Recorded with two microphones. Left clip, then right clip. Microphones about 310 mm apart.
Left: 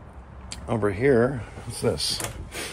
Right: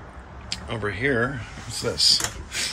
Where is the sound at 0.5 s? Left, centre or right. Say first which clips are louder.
Left 3 dB; left.